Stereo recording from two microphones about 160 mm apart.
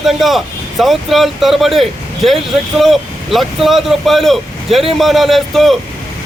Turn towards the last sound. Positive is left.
turn(degrees=0)  # may be behind; listen again after turning